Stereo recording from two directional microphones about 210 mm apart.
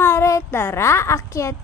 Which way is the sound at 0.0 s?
10° left (ahead or behind).